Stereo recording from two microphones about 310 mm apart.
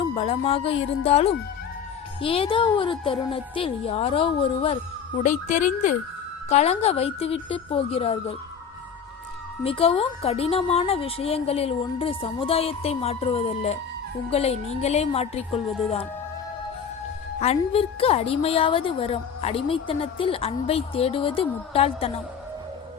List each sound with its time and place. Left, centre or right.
0.1 s a woman's voice: centre
9.6 s a woman's voice: centre
17.4 s a woman's voice: centre